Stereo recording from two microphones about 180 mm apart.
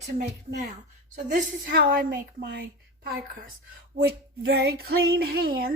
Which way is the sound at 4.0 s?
65° right (ahead or behind).